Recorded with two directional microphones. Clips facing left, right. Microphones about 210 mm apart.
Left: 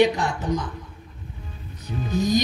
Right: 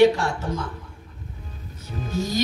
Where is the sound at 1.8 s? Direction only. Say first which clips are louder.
Left 4 dB; 15° left (ahead or behind).